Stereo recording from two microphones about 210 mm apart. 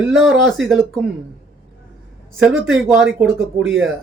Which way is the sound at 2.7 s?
Centre (ahead or behind).